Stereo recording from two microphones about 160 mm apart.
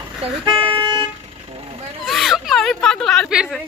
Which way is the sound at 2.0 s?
Centre (ahead or behind).